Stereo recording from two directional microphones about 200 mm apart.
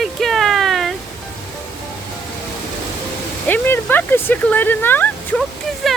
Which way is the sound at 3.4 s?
10° left (ahead or behind).